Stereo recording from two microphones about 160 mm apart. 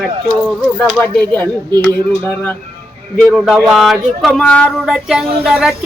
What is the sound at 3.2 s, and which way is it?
Speech, centre (ahead or behind).